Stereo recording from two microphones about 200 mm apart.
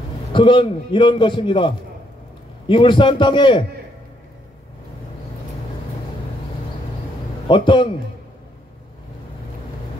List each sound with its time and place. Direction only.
0.3 s a man's voice: 25° left (ahead or behind)
2.7 s a man's voice: 25° left (ahead or behind)
7.4 s a man's voice: 25° left (ahead or behind)